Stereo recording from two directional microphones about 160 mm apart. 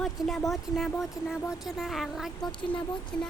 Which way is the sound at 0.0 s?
Centre (ahead or behind).